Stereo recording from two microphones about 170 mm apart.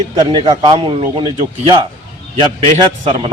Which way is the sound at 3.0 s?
35° right (ahead or behind).